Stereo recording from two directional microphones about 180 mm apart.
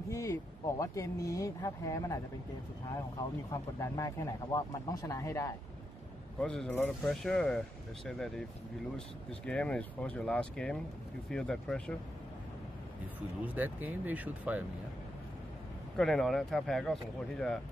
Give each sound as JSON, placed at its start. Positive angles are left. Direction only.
{"t": 0.1, "sound": "speech", "side_deg": 15}
{"t": 3.2, "sound": "speech", "side_deg": 20}
{"t": 6.4, "sound": "speech", "side_deg": 5}
{"t": 9.5, "sound": "speech", "side_deg": 5}
{"t": 13.6, "sound": "speech", "side_deg": -10}
{"t": 16.0, "sound": "speech", "side_deg": 0}